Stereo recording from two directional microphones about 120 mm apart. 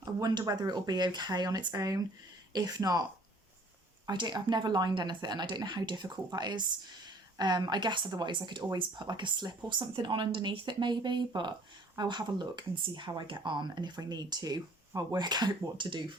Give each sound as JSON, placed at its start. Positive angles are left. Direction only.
{"t": 0.0, "sound": "speech", "side_deg": -35}